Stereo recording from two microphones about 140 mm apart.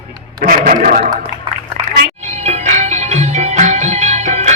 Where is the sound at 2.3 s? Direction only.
55° right (ahead or behind).